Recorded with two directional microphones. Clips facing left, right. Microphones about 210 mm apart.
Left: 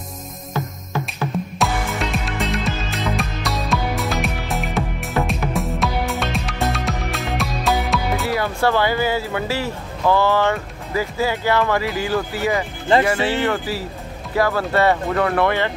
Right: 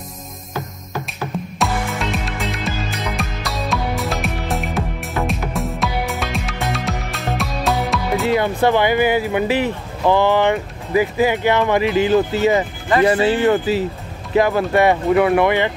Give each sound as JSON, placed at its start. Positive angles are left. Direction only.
{"t": 1.6, "sound": "music", "side_deg": 0}
{"t": 8.3, "sound": "speech", "side_deg": -20}